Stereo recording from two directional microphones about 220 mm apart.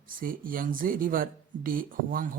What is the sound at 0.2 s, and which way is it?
Speech, 40° right (ahead or behind).